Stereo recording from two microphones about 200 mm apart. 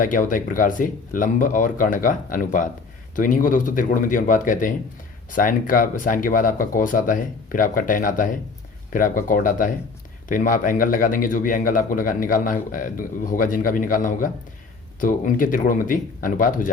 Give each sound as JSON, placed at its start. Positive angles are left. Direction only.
{"t": 0.0, "sound": "speech", "side_deg": 40}